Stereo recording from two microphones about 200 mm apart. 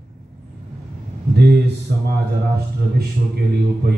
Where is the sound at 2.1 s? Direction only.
50° right (ahead or behind).